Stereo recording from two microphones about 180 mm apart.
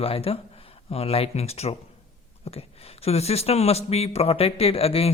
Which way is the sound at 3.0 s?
35° left (ahead or behind).